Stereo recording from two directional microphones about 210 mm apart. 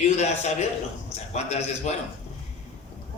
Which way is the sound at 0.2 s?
30° left (ahead or behind).